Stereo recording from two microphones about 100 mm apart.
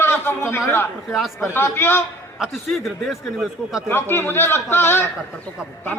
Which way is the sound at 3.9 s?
25° left (ahead or behind).